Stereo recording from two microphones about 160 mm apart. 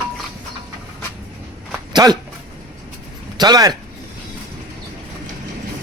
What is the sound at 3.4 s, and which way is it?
Speech, 25° right (ahead or behind).